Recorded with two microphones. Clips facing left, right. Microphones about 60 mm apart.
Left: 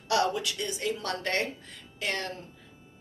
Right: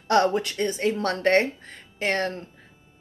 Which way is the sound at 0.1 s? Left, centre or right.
Right.